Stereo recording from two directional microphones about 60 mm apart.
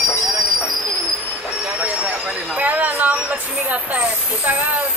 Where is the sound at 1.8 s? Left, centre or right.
Right.